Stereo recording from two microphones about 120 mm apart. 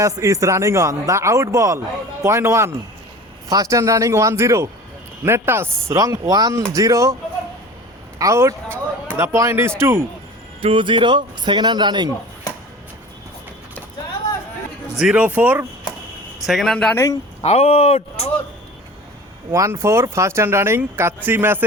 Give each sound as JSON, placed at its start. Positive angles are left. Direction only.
{"t": 0.0, "sound": "speech", "side_deg": -25}
{"t": 8.2, "sound": "speech", "side_deg": -25}
{"t": 10.6, "sound": "speech", "side_deg": -45}
{"t": 14.9, "sound": "speech", "side_deg": -5}
{"t": 16.5, "sound": "speech", "side_deg": 0}
{"t": 16.9, "sound": "speech", "side_deg": 20}
{"t": 17.4, "sound": "speech", "side_deg": 60}
{"t": 19.5, "sound": "speech", "side_deg": -25}